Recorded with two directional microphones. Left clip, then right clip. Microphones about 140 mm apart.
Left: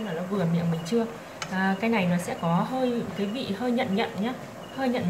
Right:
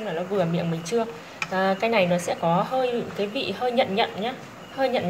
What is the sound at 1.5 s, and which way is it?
Speech, 25° right (ahead or behind).